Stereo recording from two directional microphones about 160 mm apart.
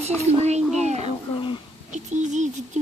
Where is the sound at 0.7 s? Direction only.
45° right (ahead or behind).